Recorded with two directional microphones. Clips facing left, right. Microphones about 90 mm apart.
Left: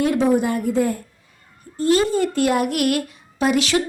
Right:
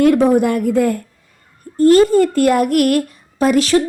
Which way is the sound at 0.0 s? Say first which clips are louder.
Right 6 dB; 55° right (ahead or behind).